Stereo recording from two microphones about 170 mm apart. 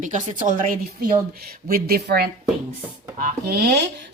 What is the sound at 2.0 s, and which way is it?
Speech, 65° right (ahead or behind).